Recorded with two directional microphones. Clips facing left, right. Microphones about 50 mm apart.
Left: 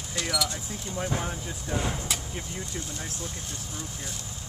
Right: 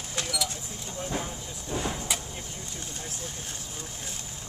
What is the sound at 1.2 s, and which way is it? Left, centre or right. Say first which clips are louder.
Speech: left 3 dB; left.